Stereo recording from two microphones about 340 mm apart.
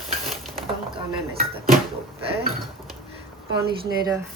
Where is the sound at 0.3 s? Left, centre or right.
Centre.